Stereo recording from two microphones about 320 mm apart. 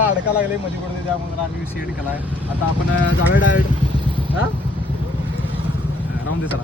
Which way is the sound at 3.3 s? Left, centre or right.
Left.